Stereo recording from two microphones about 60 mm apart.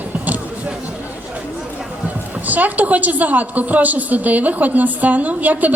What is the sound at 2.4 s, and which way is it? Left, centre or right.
A woman's voice, right.